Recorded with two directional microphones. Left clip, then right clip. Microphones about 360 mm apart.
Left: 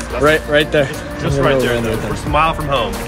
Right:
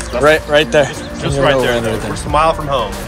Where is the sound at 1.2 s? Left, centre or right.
Right.